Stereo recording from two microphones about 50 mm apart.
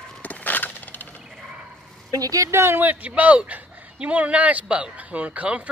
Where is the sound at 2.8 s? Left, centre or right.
Right.